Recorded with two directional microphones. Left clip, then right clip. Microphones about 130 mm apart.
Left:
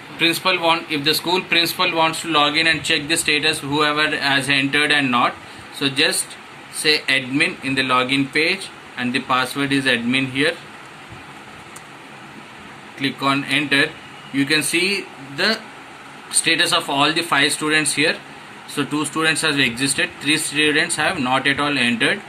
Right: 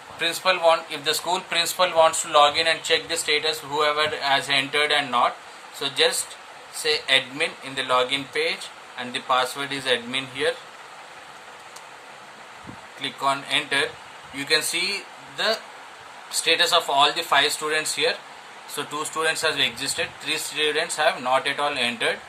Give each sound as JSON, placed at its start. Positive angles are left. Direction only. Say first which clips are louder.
{"t": 0.2, "sound": "speech", "louder": "left 4 dB", "side_deg": -50}
{"t": 2.4, "sound": "speech", "louder": "left 2 dB", "side_deg": -40}
{"t": 13.2, "sound": "speech", "louder": "left 3 dB", "side_deg": -30}
{"t": 18.9, "sound": "speech", "louder": "left 4 dB", "side_deg": 10}
{"t": 19.2, "sound": "speech", "louder": "left 4 dB", "side_deg": -25}